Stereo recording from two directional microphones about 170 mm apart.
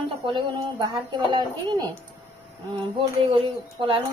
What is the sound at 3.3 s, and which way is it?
Speech, 30° right (ahead or behind).